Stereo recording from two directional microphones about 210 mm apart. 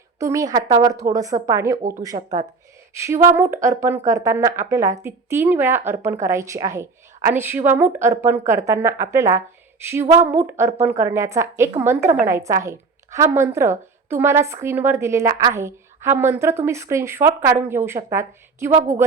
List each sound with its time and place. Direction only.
0.2 s a woman's voice: 15° right (ahead or behind)
1.8 s speech: 40° right (ahead or behind)
2.9 s a sound: 15° right (ahead or behind)
3.2 s a woman's voice: 10° right (ahead or behind)